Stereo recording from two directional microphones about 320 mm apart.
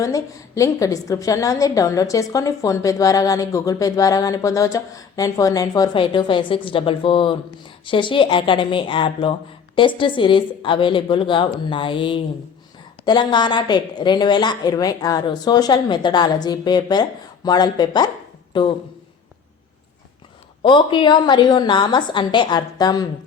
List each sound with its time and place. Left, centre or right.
0.0 s a woman's voice: centre
20.6 s a woman's voice: centre